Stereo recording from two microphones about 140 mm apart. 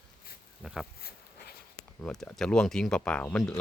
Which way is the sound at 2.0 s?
5° left (ahead or behind).